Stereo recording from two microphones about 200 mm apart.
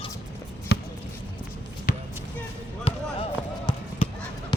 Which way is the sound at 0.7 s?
55° left (ahead or behind).